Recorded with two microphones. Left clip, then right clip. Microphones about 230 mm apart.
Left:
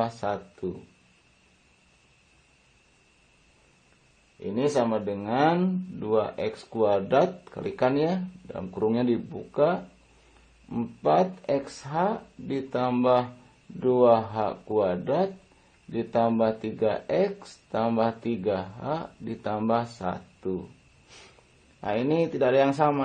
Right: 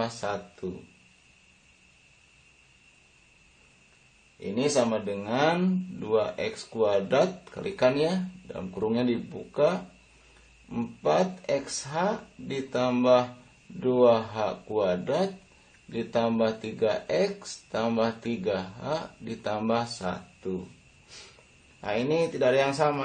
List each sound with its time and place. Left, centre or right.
0.0 s speech: left
4.6 s speech: left
21.8 s speech: left